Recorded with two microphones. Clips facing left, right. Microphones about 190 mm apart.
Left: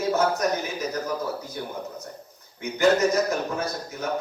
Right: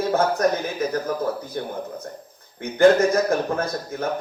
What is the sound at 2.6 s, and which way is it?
A man's voice, 55° right (ahead or behind).